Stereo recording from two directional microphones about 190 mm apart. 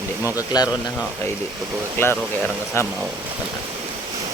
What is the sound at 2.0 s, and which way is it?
Speech, 10° left (ahead or behind).